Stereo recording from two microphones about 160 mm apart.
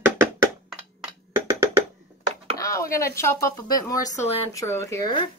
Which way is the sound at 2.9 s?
15° left (ahead or behind).